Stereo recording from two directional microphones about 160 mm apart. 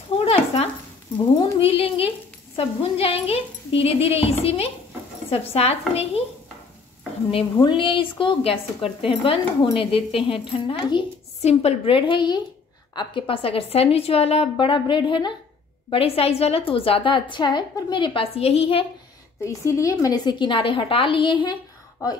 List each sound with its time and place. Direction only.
0.2 s a sound: 40° left (ahead or behind)
1.1 s a woman's voice: 35° left (ahead or behind)
7.5 s a woman's voice: 30° left (ahead or behind)
19.4 s a woman's voice: 20° left (ahead or behind)